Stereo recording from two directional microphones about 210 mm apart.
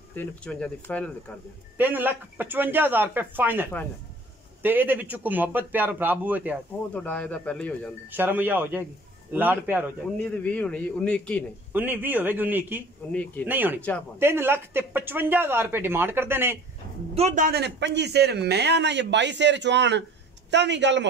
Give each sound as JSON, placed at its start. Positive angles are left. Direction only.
{"t": 0.1, "sound": "a man's voice", "side_deg": 5}
{"t": 1.8, "sound": "speech", "side_deg": -10}
{"t": 4.6, "sound": "speech", "side_deg": -10}
{"t": 6.9, "sound": "speech", "side_deg": 5}
{"t": 8.1, "sound": "speech", "side_deg": -10}
{"t": 10.1, "sound": "a man's voice", "side_deg": 5}
{"t": 11.7, "sound": "speech", "side_deg": -10}
{"t": 13.1, "sound": "speech", "side_deg": 5}
{"t": 13.5, "sound": "speech", "side_deg": -10}
{"t": 13.7, "sound": "speech", "side_deg": 5}
{"t": 14.1, "sound": "speech", "side_deg": -10}
{"t": 17.1, "sound": "a man's voice", "side_deg": -35}